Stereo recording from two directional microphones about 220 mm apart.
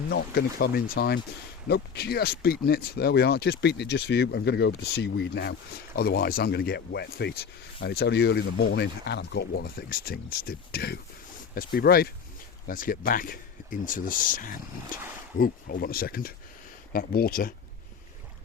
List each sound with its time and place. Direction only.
0.1 s speech: 45° left (ahead or behind)